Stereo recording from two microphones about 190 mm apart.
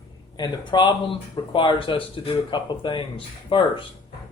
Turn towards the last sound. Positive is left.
turn(degrees=25)  # may be behind; listen again after turning